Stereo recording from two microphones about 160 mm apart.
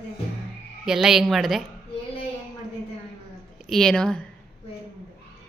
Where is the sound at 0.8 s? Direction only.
5° right (ahead or behind).